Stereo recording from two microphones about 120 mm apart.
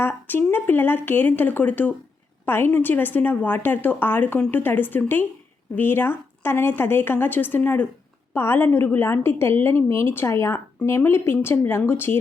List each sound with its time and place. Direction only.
0.0 s a woman's voice: 15° left (ahead or behind)